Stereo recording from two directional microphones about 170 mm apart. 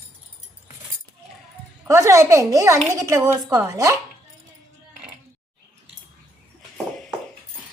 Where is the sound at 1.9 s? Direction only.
15° right (ahead or behind).